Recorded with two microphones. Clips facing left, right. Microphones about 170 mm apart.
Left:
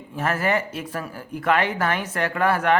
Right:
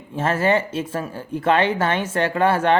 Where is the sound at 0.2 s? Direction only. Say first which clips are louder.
Right 4 dB; 25° right (ahead or behind).